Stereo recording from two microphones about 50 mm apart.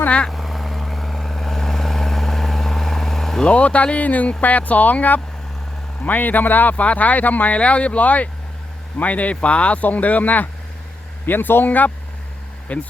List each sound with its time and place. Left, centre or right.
0.3 s vehicle: centre
3.4 s speech: left